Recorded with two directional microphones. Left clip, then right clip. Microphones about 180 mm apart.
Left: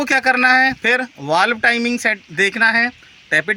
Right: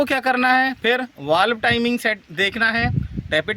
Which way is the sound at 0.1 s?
65° right (ahead or behind).